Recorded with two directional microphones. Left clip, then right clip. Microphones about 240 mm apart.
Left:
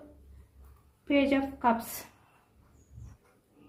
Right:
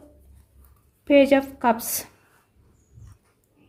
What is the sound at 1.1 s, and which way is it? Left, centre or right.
Speech, right.